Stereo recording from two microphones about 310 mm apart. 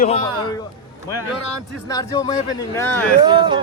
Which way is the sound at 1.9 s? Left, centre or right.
Centre.